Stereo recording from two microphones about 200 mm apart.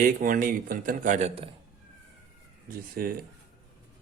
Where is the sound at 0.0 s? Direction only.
45° right (ahead or behind).